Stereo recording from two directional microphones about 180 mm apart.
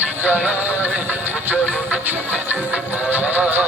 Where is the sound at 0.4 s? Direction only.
10° right (ahead or behind).